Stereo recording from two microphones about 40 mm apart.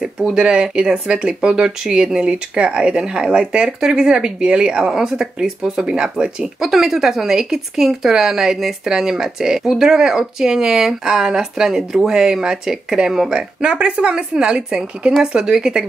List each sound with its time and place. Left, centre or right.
0.0 s speech: centre
6.6 s speech: centre
11.7 s speech: centre
13.6 s speech: right